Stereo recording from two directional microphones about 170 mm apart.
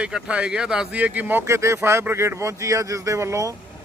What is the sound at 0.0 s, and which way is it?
Speech, 5° right (ahead or behind).